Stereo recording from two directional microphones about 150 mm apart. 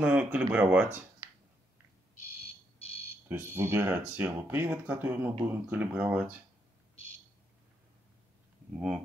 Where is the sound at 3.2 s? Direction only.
15° right (ahead or behind).